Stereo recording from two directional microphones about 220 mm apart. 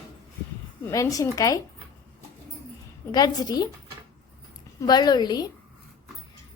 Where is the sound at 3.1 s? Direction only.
20° left (ahead or behind).